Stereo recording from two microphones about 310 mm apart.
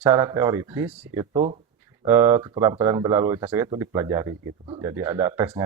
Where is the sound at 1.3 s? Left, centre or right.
Centre.